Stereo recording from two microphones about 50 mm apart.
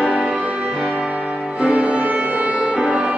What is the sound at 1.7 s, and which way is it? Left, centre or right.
Music, right.